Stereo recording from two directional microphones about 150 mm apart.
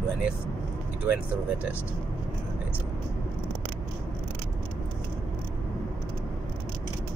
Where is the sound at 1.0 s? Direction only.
20° right (ahead or behind).